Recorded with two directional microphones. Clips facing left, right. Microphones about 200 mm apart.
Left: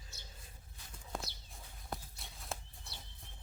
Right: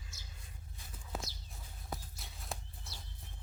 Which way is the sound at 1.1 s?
5° right (ahead or behind).